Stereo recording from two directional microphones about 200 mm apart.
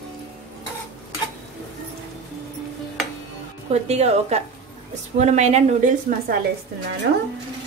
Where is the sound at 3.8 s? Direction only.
30° right (ahead or behind).